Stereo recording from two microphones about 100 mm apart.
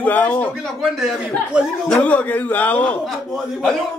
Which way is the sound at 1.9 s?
15° left (ahead or behind).